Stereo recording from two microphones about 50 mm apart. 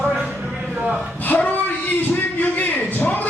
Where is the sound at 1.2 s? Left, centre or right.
Left.